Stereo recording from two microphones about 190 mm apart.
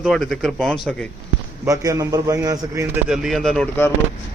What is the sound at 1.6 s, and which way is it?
A man's voice, 15° right (ahead or behind).